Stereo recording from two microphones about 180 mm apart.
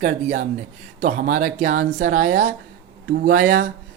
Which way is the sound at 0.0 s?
45° right (ahead or behind).